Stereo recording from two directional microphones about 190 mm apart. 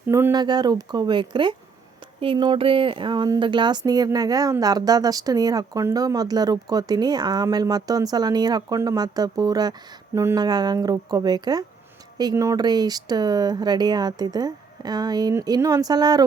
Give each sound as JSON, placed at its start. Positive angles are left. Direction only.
{"t": 0.1, "sound": "speech", "side_deg": -15}